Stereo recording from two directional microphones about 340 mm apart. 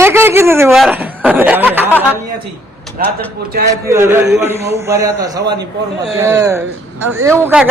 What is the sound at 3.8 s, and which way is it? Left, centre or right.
Speech, centre.